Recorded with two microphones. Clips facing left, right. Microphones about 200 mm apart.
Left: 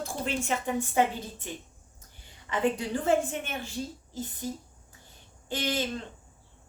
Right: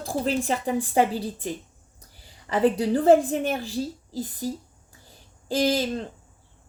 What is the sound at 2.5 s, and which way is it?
A woman's voice, 35° right (ahead or behind).